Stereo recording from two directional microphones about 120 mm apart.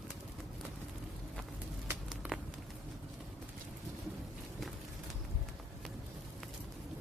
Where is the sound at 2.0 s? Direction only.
Centre (ahead or behind).